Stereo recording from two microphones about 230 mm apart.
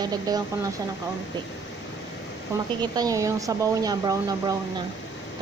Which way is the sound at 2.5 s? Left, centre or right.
Centre.